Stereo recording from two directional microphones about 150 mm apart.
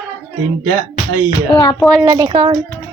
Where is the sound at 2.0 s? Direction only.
25° right (ahead or behind).